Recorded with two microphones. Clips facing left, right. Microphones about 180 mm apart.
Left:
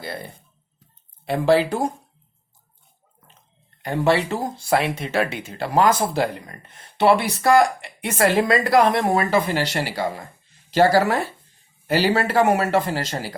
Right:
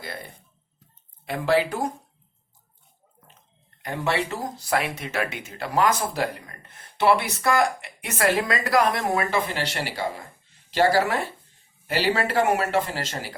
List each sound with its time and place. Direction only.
1.2 s speech: 30° left (ahead or behind)
3.8 s speech: 30° left (ahead or behind)
9.3 s speech: 40° left (ahead or behind)
11.9 s speech: 40° left (ahead or behind)